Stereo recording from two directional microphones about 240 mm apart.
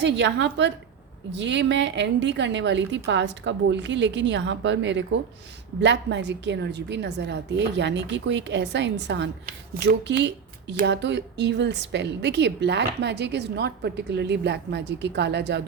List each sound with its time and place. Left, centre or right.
0.0 s a woman's voice: right